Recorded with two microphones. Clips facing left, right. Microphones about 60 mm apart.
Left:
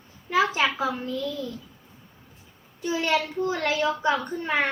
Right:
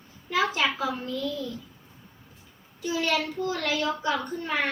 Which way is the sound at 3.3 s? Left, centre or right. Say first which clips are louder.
Left 3 dB; left.